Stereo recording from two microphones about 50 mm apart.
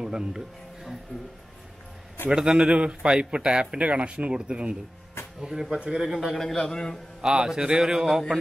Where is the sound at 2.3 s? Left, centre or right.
Centre.